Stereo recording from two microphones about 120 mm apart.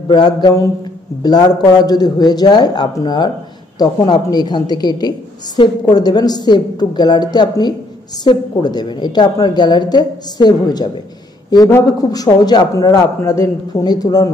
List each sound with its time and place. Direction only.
0.1 s a woman's voice: 35° left (ahead or behind)